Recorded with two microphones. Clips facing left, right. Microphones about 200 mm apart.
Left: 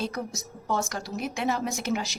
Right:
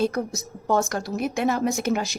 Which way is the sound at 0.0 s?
50° right (ahead or behind).